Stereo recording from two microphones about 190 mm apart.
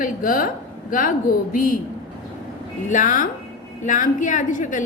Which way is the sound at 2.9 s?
40° left (ahead or behind).